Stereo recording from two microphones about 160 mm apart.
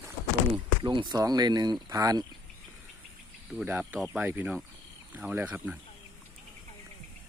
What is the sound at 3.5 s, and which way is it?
Speech, 5° right (ahead or behind).